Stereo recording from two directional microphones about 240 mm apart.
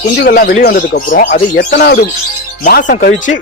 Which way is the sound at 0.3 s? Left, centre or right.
Left.